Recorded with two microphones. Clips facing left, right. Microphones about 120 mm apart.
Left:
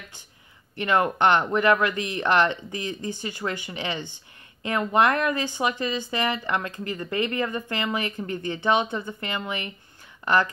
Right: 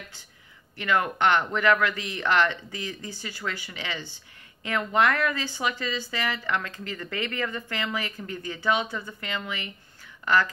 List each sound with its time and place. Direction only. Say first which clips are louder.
0.7 s speech: left 3 dB; 20° left (ahead or behind)